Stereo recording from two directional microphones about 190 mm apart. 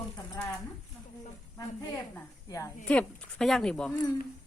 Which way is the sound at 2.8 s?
5° left (ahead or behind).